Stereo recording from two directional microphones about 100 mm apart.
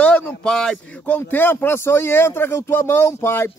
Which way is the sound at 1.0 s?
20° left (ahead or behind).